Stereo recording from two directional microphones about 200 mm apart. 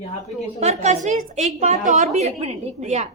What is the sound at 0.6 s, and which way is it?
A woman's voice, 35° right (ahead or behind).